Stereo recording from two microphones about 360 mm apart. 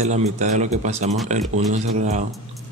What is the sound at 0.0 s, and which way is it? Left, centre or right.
Speech, centre.